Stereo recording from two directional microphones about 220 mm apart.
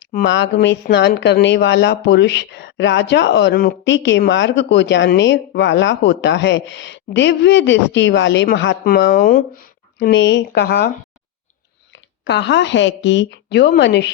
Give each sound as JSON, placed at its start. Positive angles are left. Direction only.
{"t": 0.3, "sound": "speech", "side_deg": 55}
{"t": 10.0, "sound": "speech", "side_deg": 50}
{"t": 12.2, "sound": "speech", "side_deg": 50}